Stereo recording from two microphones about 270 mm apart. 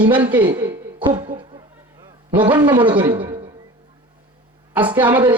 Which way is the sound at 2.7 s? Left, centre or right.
Centre.